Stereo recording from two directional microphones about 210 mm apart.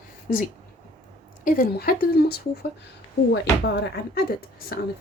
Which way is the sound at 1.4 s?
40° left (ahead or behind).